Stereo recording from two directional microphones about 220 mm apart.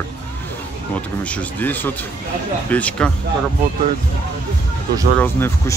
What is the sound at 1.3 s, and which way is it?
Speech, 10° left (ahead or behind).